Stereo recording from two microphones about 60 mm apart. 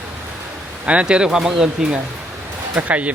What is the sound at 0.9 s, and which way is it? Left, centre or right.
Speech, centre.